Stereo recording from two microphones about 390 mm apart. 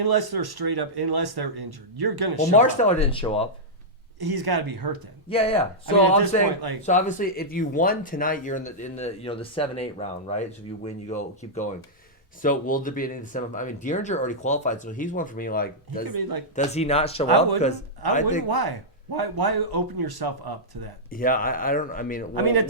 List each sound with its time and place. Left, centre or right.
0.0 s speech: right
2.6 s speech: centre
4.2 s speech: right
5.3 s speech: centre
5.9 s speech: right
6.8 s speech: centre
16.0 s speech: right
16.6 s speech: centre
18.4 s speech: right
21.1 s speech: left
22.4 s speech: right